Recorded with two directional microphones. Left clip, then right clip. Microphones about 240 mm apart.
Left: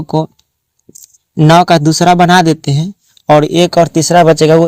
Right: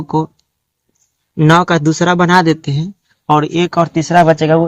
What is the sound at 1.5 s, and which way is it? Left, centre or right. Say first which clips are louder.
Speech: left 4 dB; left.